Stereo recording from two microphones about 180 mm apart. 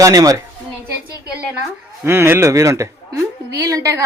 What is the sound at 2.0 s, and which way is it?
A man's voice, 15° right (ahead or behind).